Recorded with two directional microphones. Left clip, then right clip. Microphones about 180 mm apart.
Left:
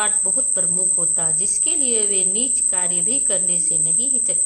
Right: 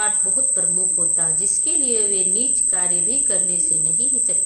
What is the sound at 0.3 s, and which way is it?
A woman's voice, 30° left (ahead or behind).